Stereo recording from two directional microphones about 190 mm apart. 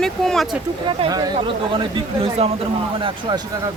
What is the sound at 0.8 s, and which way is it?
Speech, 25° right (ahead or behind).